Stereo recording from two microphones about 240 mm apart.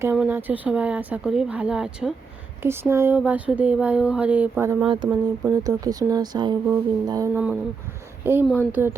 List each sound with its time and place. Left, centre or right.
0.0 s speech: centre